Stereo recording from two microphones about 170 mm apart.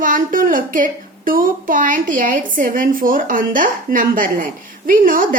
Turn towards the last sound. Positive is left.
turn(degrees=-55)  # may be behind; listen again after turning